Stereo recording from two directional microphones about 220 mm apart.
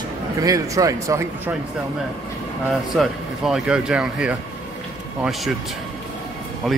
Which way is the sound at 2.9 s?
Centre (ahead or behind).